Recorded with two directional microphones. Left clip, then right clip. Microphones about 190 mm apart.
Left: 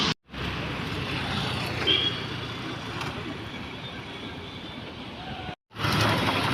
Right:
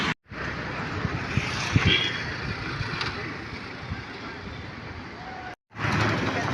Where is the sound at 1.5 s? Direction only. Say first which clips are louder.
Right 3 dB; 40° left (ahead or behind).